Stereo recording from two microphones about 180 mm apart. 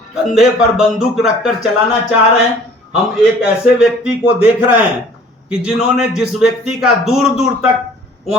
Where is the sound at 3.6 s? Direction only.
5° right (ahead or behind).